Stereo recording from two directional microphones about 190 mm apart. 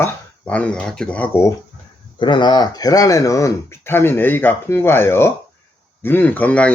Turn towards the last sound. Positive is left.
turn(degrees=10)  # may be behind; listen again after turning